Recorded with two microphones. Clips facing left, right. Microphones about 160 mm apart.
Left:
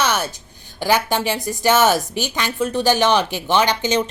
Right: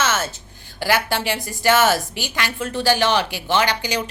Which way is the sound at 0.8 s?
15° left (ahead or behind).